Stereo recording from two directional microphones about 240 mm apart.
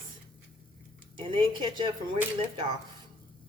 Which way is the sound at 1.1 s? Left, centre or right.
Centre.